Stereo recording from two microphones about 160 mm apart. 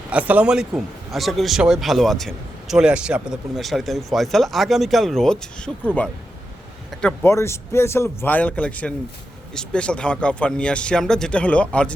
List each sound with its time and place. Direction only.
0.1 s a man's voice: 10° right (ahead or behind)
6.9 s speech: 5° left (ahead or behind)
7.3 s speech: 15° left (ahead or behind)